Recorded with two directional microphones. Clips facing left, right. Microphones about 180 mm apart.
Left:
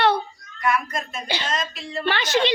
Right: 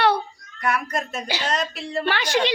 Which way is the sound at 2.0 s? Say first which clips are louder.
Left 1 dB; 10° right (ahead or behind).